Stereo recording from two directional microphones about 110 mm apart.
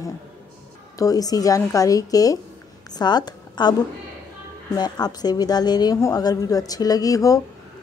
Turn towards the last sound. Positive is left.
turn(degrees=30)  # may be behind; listen again after turning